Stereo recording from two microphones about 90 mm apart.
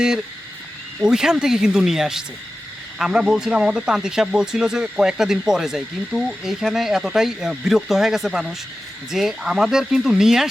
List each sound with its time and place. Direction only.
1.0 s speech: 5° right (ahead or behind)